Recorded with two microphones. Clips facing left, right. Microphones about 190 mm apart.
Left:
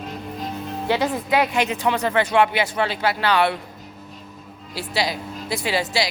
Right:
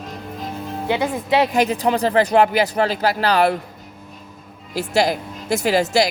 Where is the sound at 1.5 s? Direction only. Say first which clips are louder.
Right 4 dB; 35° right (ahead or behind).